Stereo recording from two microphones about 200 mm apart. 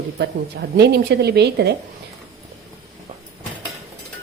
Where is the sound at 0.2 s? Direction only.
55° right (ahead or behind).